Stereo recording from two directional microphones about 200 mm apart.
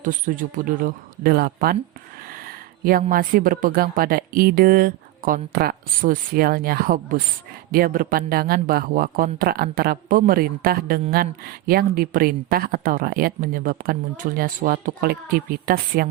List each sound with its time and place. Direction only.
0.0 s speech: 40° right (ahead or behind)
2.8 s speech: 45° right (ahead or behind)